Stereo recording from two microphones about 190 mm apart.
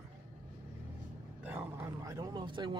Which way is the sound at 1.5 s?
10° right (ahead or behind).